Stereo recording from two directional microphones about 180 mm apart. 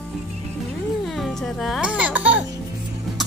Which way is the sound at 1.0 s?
Centre (ahead or behind).